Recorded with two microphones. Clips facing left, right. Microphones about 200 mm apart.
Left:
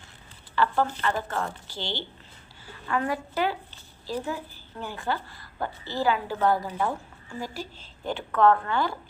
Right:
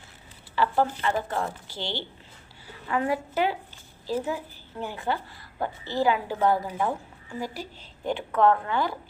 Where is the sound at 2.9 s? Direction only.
20° right (ahead or behind).